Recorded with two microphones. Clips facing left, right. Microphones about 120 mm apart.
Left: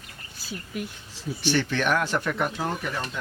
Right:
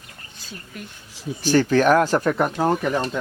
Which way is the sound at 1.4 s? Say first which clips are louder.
Right 8 dB; 40° right (ahead or behind).